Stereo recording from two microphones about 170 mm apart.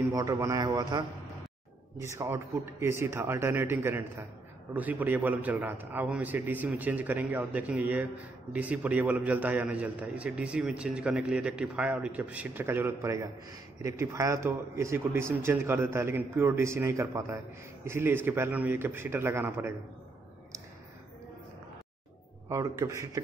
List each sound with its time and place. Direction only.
0.0 s a man's voice: 20° right (ahead or behind)
22.5 s a man's voice: 20° right (ahead or behind)